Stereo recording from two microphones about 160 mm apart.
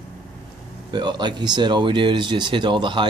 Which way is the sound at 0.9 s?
30° right (ahead or behind).